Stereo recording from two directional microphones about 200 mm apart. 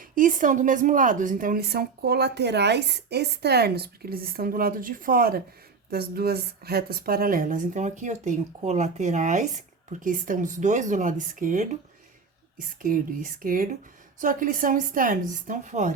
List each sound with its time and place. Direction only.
0.0 s a woman's voice: 40° right (ahead or behind)